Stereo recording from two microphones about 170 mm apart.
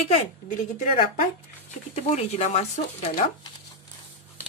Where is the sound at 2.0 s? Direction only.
40° left (ahead or behind).